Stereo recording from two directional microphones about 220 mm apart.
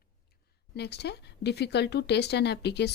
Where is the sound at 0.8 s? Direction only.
50° left (ahead or behind).